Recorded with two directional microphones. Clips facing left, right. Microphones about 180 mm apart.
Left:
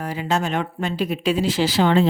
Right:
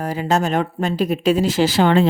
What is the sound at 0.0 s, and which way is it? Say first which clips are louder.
Speech: right 4 dB; 45° right (ahead or behind).